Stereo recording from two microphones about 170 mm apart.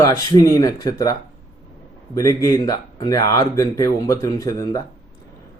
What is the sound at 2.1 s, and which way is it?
Speech, 20° left (ahead or behind).